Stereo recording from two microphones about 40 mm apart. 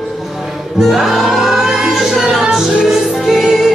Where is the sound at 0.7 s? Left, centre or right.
Centre.